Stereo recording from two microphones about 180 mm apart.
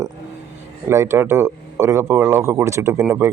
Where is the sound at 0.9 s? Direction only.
15° right (ahead or behind).